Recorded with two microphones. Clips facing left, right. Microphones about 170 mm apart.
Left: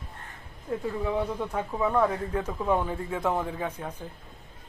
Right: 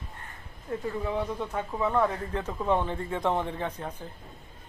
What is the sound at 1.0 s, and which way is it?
Speech, 5° left (ahead or behind).